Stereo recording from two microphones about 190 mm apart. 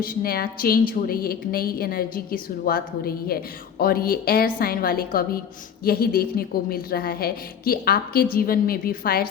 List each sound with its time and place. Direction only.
0.0 s a woman's voice: 50° left (ahead or behind)